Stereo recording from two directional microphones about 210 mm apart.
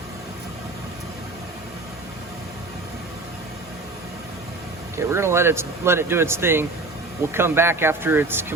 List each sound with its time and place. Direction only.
4.9 s speech: 10° right (ahead or behind)